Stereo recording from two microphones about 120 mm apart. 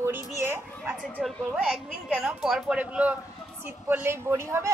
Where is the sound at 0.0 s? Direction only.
20° right (ahead or behind).